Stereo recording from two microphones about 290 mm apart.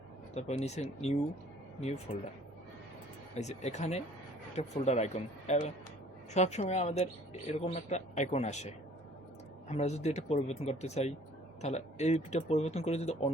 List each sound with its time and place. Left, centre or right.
0.3 s speech: left
3.3 s speech: left